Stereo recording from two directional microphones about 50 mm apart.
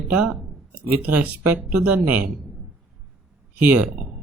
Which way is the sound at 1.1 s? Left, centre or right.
Right.